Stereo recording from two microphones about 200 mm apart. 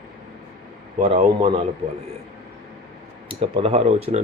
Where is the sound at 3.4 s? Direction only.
30° right (ahead or behind).